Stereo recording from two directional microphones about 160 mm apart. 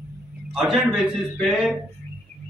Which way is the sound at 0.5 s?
Centre (ahead or behind).